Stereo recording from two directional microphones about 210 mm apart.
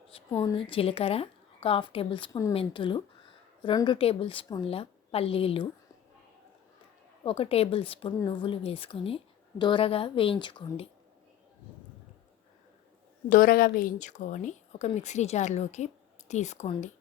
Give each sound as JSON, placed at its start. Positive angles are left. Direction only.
{"t": 0.3, "sound": "a woman's voice", "side_deg": 10}
{"t": 0.5, "sound": "speech", "side_deg": 25}
{"t": 7.3, "sound": "speech", "side_deg": 25}
{"t": 13.2, "sound": "a woman's voice", "side_deg": 40}